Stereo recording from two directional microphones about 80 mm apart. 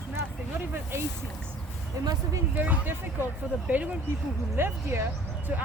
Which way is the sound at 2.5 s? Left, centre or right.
Right.